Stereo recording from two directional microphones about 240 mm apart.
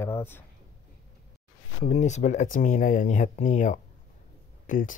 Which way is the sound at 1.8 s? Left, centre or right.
Left.